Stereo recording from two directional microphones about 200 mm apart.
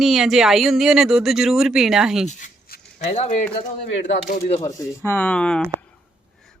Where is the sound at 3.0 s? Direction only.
35° left (ahead or behind).